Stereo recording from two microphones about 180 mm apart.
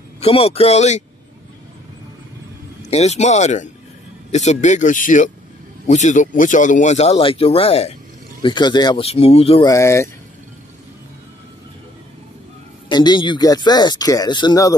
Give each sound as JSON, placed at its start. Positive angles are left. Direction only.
{"t": 0.2, "sound": "speech", "side_deg": 35}
{"t": 2.9, "sound": "speech", "side_deg": 40}
{"t": 9.7, "sound": "speech", "side_deg": 15}
{"t": 12.8, "sound": "speech", "side_deg": 25}